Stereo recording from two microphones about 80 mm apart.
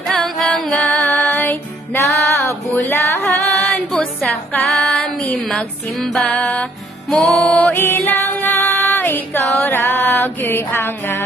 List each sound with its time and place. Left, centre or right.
0.1 s music: centre
0.7 s music: centre; by 2.5 s left
2.7 s a sound: left
3.3 s music: centre